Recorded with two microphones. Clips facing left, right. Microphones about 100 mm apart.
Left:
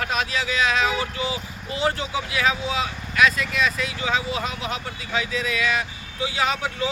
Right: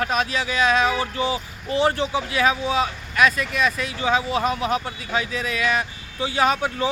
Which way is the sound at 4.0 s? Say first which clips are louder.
Right 5 dB; 45° right (ahead or behind).